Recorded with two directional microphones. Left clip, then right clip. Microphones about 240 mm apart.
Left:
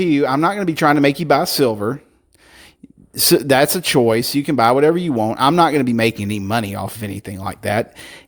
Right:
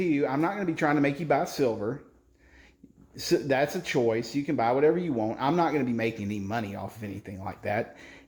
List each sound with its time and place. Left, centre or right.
0.0 s speech: left
3.2 s speech: left